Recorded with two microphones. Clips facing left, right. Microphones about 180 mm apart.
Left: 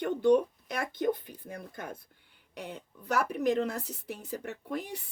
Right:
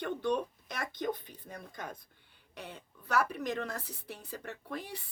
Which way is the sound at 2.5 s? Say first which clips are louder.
Left 5 dB; 10° left (ahead or behind).